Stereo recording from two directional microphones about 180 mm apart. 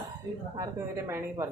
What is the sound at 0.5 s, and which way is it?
Speech, 15° right (ahead or behind).